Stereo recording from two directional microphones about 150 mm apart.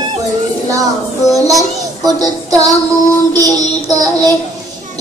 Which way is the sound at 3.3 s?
25° right (ahead or behind).